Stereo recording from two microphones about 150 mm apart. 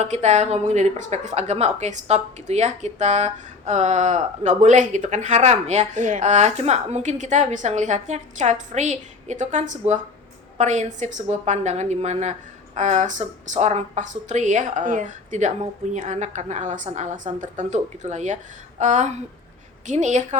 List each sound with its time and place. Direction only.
0.0 s a woman's voice: 50° right (ahead or behind)